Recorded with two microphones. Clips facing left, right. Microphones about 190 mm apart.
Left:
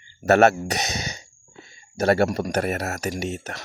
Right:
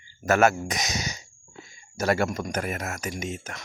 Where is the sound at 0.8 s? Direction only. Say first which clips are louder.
Left 1 dB; 30° left (ahead or behind).